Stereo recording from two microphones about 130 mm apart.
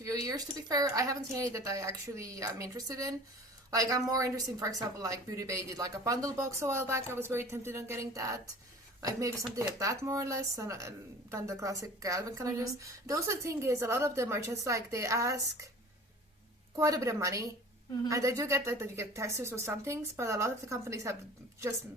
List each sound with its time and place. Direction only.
0.0 s speech: 25° right (ahead or behind)
16.7 s speech: 25° right (ahead or behind)